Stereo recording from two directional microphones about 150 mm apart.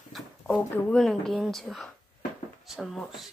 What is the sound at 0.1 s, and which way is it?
Speech, 5° left (ahead or behind).